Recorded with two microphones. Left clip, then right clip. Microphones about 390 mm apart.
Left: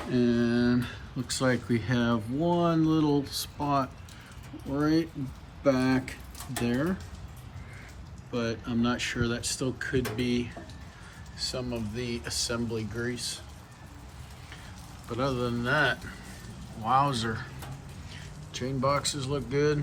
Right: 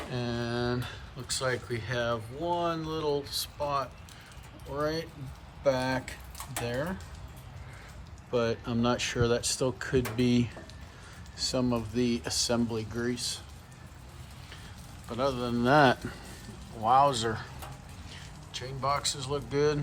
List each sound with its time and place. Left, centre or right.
0.1 s speech: centre
8.3 s speech: centre
15.1 s speech: centre